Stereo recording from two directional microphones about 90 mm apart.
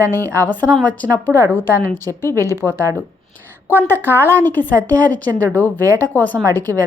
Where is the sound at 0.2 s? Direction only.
35° right (ahead or behind).